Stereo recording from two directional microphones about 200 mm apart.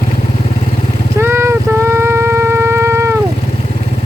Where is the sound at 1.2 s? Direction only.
10° right (ahead or behind).